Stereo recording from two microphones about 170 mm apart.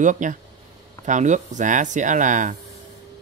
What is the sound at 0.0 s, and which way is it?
Speech, 50° right (ahead or behind).